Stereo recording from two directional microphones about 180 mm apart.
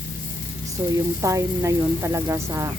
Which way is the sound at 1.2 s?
15° right (ahead or behind).